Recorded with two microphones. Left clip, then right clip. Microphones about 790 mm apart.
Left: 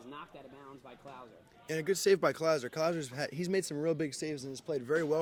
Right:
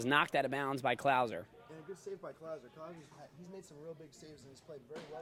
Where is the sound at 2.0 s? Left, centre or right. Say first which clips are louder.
Left 19 dB; left.